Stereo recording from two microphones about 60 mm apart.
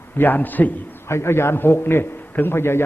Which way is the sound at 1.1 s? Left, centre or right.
Left.